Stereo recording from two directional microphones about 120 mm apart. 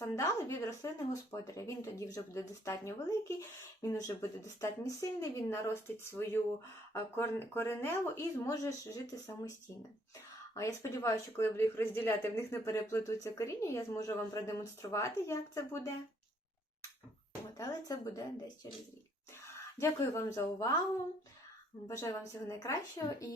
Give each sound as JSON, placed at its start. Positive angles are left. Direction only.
{"t": 0.0, "sound": "speech", "side_deg": 25}
{"t": 17.6, "sound": "speech", "side_deg": 30}
{"t": 19.8, "sound": "speech", "side_deg": 25}
{"t": 21.8, "sound": "speech", "side_deg": 25}